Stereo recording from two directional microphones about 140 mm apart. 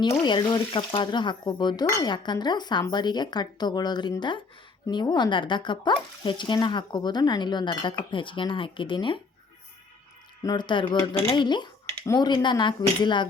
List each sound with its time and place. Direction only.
0.3 s speech: 35° left (ahead or behind)
10.4 s speech: 30° left (ahead or behind)